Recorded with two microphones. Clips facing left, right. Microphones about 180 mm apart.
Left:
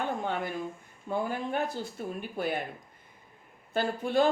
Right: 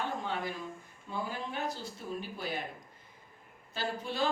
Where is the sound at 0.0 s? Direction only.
55° left (ahead or behind).